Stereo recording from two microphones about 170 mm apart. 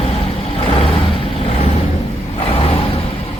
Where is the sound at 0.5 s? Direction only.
35° left (ahead or behind).